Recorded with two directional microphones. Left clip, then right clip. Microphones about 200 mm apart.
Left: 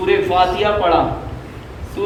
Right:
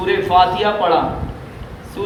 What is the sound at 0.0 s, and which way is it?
Speech, 50° right (ahead or behind).